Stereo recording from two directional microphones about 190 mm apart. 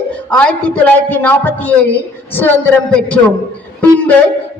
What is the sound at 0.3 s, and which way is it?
A man's voice, 5° left (ahead or behind).